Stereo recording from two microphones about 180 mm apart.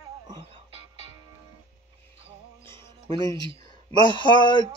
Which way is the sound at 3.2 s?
20° left (ahead or behind).